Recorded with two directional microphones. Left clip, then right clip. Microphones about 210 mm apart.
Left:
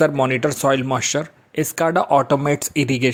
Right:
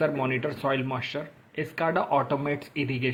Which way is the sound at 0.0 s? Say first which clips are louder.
Left 9 dB; 45° left (ahead or behind).